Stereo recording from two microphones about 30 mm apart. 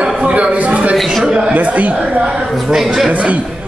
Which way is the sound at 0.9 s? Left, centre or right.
Centre.